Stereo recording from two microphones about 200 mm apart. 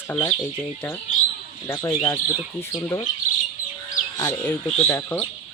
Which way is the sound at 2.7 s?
25° left (ahead or behind).